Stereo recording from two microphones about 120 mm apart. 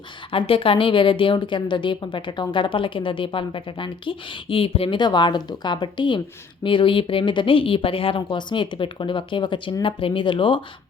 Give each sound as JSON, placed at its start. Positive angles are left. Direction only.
{"t": 0.3, "sound": "a woman's voice", "side_deg": 45}